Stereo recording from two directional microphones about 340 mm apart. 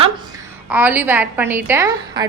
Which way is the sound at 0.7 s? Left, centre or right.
Centre.